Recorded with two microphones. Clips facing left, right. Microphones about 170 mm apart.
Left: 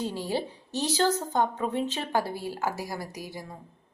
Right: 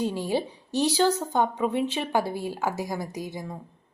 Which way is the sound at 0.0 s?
15° right (ahead or behind).